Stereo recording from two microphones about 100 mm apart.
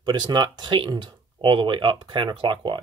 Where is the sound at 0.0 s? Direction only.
45° right (ahead or behind).